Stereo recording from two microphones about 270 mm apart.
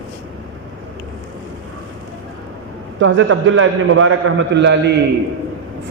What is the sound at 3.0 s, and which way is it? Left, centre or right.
A man's voice, right.